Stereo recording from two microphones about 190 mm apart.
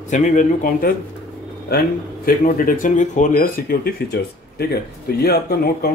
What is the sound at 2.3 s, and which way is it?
Speech, 45° left (ahead or behind).